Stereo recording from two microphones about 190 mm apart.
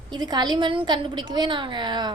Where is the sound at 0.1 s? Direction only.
20° right (ahead or behind).